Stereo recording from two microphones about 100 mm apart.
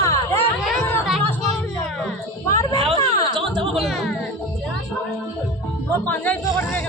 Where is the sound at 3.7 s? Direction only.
Centre (ahead or behind).